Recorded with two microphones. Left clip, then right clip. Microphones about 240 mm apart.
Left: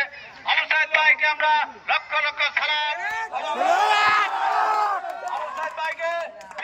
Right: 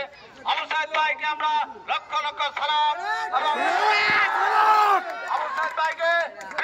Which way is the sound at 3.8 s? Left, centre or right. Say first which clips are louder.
Right 1 dB; centre.